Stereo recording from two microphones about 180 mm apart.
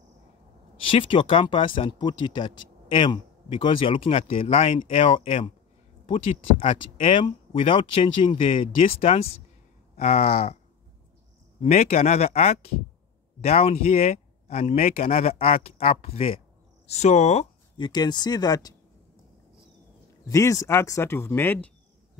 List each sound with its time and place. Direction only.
0.8 s a man's voice: 30° left (ahead or behind)
11.6 s speech: 35° left (ahead or behind)
17.7 s a man's voice: 25° left (ahead or behind)
20.2 s speech: 20° left (ahead or behind)